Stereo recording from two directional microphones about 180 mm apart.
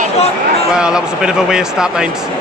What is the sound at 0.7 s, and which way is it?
Speech, 5° right (ahead or behind).